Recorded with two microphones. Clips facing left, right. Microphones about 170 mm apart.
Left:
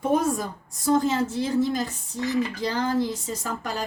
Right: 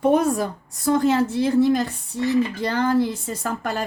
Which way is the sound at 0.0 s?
65° right (ahead or behind).